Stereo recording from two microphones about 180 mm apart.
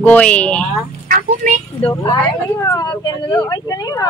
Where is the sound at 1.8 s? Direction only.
20° left (ahead or behind).